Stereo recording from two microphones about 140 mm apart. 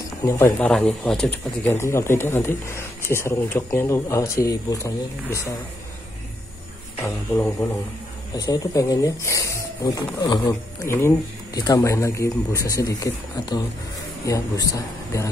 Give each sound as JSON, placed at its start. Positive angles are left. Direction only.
{"t": 0.2, "sound": "a man's voice", "side_deg": 20}
{"t": 0.6, "sound": "speech", "side_deg": 10}
{"t": 8.4, "sound": "speech", "side_deg": 25}
{"t": 10.9, "sound": "speech", "side_deg": 20}